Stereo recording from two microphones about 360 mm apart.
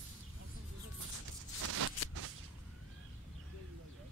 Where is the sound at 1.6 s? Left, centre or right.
Right.